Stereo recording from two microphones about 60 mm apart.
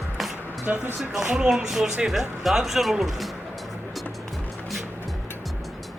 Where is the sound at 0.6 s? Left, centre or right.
Right.